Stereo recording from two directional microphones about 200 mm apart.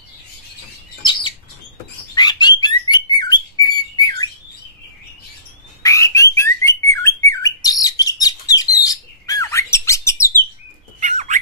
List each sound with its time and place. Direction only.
2.1 s bird: 20° left (ahead or behind)
5.8 s bird: 15° left (ahead or behind)
11.0 s bird: 35° right (ahead or behind)